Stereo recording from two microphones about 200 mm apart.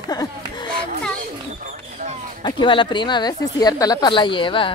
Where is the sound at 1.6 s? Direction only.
35° right (ahead or behind).